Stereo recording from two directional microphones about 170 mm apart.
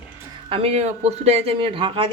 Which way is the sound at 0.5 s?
35° right (ahead or behind).